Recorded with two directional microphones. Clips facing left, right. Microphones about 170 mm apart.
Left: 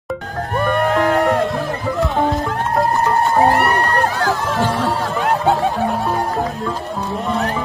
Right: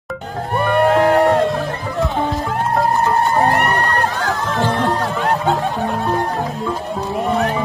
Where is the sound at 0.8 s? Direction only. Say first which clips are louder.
Right 4 dB; 30° right (ahead or behind).